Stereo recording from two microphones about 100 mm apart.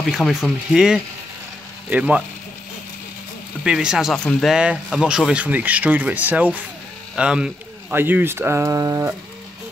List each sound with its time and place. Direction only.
0.0 s speech: centre (ahead or behind)
3.6 s speech: 5° right (ahead or behind)
4.5 s speech: 10° right (ahead or behind)
7.9 s speech: 20° right (ahead or behind)